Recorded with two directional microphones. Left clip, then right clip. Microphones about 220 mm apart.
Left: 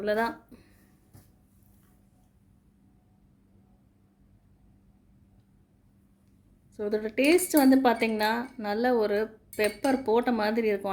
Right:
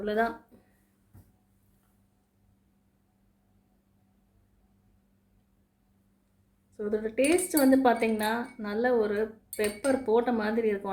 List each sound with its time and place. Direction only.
0.0 s a woman's voice: 45° left (ahead or behind)
6.7 s a woman's voice: 40° left (ahead or behind)